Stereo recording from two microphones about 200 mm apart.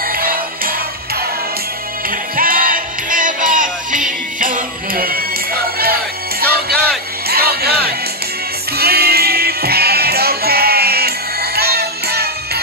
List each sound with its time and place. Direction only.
0.0 s music: 45° right (ahead or behind)
6.4 s music: 50° right (ahead or behind)